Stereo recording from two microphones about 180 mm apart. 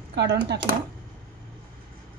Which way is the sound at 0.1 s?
70° right (ahead or behind).